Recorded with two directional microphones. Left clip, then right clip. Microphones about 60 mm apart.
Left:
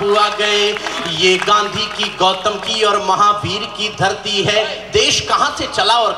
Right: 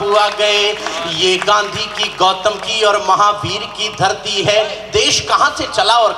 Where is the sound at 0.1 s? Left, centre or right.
Right.